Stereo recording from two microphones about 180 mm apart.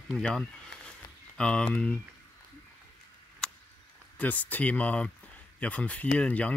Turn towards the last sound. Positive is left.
turn(degrees=5)  # may be behind; listen again after turning